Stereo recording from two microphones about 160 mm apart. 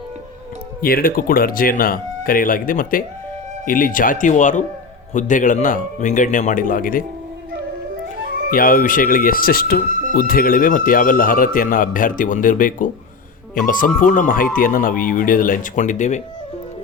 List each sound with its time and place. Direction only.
0.8 s speech: 65° left (ahead or behind)
8.4 s speech: 60° left (ahead or behind)